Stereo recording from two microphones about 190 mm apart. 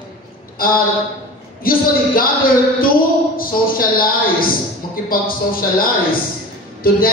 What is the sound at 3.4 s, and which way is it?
A woman's voice, 50° left (ahead or behind).